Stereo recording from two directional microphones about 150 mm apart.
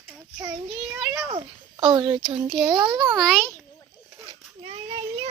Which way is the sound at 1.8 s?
30° right (ahead or behind).